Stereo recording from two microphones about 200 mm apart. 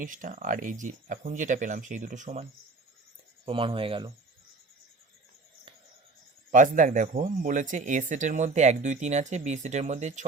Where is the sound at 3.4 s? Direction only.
25° right (ahead or behind).